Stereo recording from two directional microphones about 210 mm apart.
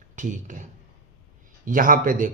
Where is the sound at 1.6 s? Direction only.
40° right (ahead or behind).